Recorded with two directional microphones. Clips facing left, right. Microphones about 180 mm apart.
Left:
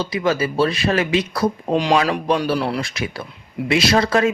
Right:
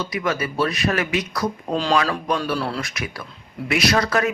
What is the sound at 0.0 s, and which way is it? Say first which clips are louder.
Speech: left 4 dB; 30° left (ahead or behind).